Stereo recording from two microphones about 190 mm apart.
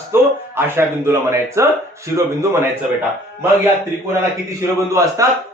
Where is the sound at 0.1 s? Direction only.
10° right (ahead or behind).